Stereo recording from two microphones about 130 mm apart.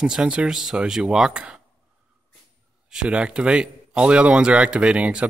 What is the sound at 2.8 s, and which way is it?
Speech, 5° right (ahead or behind).